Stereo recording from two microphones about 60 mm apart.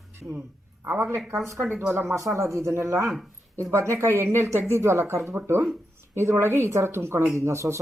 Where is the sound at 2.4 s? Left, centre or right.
Right.